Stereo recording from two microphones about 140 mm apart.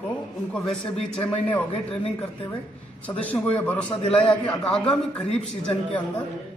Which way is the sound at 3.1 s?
10° left (ahead or behind).